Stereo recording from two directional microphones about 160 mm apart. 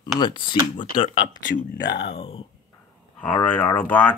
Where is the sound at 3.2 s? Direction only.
10° left (ahead or behind).